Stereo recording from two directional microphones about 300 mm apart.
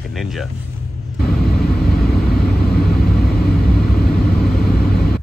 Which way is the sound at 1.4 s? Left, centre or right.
Left.